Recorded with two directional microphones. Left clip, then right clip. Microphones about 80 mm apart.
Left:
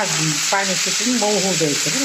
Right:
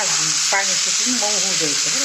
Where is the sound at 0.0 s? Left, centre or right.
Left.